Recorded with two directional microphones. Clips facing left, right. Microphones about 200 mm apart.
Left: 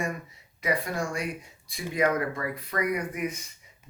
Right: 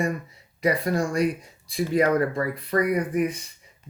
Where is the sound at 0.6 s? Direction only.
35° right (ahead or behind).